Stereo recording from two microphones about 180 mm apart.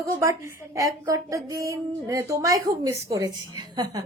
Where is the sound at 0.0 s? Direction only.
15° right (ahead or behind).